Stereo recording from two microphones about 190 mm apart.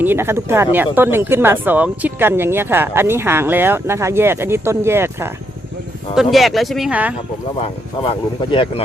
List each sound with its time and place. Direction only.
0.0 s speech: 10° right (ahead or behind)
6.1 s speech: centre (ahead or behind)
8.0 s speech: 25° left (ahead or behind)